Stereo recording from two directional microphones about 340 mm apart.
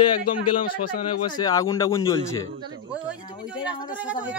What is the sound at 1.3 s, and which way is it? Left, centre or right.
Speech, centre.